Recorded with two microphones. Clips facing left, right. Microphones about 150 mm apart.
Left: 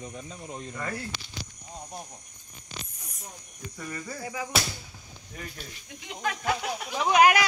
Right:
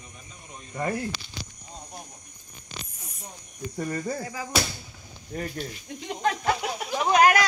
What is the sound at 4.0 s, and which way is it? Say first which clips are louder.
Music: right 7 dB; 50° right (ahead or behind).